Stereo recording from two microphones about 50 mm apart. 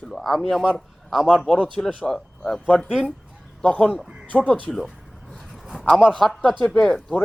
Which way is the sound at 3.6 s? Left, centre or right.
Left.